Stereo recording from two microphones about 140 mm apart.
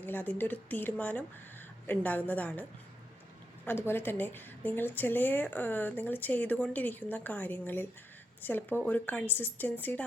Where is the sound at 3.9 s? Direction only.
15° left (ahead or behind).